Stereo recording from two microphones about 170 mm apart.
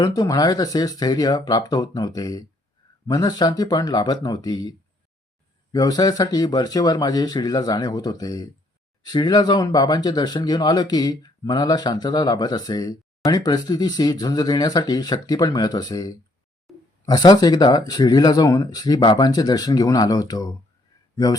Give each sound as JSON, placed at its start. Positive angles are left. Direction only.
{"t": 0.0, "sound": "speech", "side_deg": 20}
{"t": 5.7, "sound": "speech", "side_deg": 20}
{"t": 16.7, "sound": "a sound", "side_deg": 0}
{"t": 17.1, "sound": "speech", "side_deg": 25}